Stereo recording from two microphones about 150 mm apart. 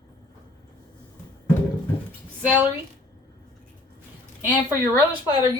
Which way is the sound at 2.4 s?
10° right (ahead or behind).